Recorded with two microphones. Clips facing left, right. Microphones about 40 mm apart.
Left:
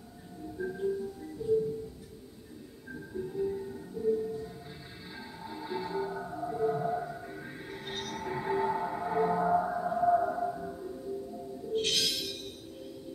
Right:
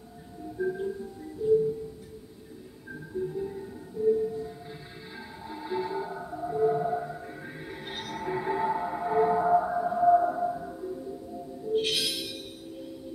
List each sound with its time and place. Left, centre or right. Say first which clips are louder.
0.6 s music: right 2 dB; centre
2.9 s music: right 5 dB; centre
5.5 s music: right 4 dB; centre